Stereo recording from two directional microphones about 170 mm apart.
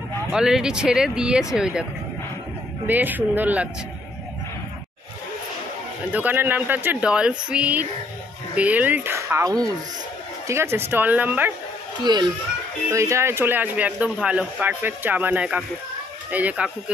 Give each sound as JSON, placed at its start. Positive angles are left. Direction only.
{"t": 0.3, "sound": "speech", "side_deg": -5}
{"t": 2.9, "sound": "speech", "side_deg": -10}
{"t": 6.1, "sound": "speech", "side_deg": -10}
{"t": 12.0, "sound": "a child's voice", "side_deg": -25}